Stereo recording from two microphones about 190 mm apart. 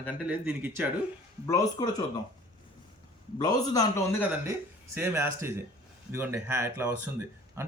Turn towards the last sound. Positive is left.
turn(degrees=-10)  # may be behind; listen again after turning